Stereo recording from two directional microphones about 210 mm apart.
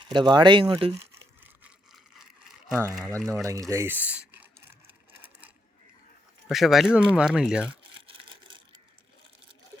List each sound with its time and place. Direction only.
0.0 s speech: 20° right (ahead or behind)
1.6 s a sound: centre (ahead or behind)
3.2 s speech: 5° left (ahead or behind)
3.4 s crumpling: 15° right (ahead or behind)
6.5 s speech: centre (ahead or behind)
7.7 s a sound: 25° right (ahead or behind)